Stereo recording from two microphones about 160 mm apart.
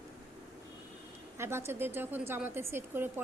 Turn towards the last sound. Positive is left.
turn(degrees=-15)  # may be behind; listen again after turning